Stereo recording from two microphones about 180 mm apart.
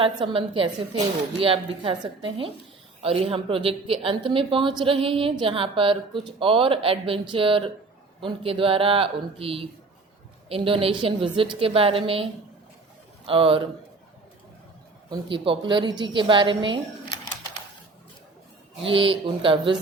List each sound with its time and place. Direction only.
0.0 s a woman's voice: 25° right (ahead or behind)
15.1 s a woman's voice: 25° right (ahead or behind)
17.1 s a sound: 25° left (ahead or behind)
18.8 s a woman's voice: 30° right (ahead or behind)